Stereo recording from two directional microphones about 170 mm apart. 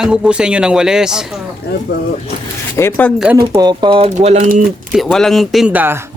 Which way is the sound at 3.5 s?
25° right (ahead or behind).